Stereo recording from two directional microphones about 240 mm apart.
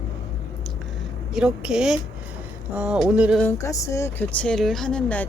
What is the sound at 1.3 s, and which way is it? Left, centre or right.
Speech, centre.